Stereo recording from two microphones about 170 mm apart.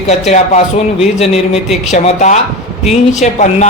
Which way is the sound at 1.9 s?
45° left (ahead or behind).